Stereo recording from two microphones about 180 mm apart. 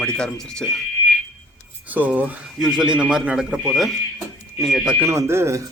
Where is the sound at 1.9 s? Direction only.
10° right (ahead or behind).